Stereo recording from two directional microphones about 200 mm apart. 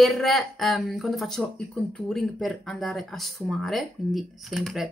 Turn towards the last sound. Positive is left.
turn(degrees=0)  # may be behind; listen again after turning